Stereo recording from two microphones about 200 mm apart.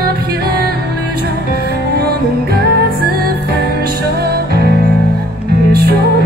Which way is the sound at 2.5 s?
50° right (ahead or behind).